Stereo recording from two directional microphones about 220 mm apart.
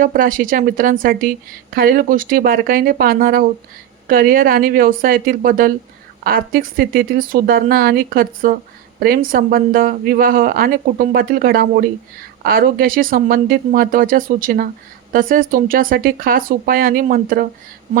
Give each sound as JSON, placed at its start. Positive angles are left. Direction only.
{"t": 0.0, "sound": "speech", "side_deg": -40}